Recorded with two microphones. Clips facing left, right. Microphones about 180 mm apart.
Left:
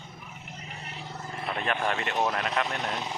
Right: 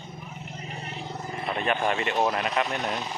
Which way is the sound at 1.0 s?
15° right (ahead or behind).